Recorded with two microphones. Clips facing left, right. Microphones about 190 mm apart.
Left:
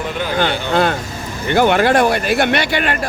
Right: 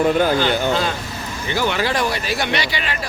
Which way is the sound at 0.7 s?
60° left (ahead or behind).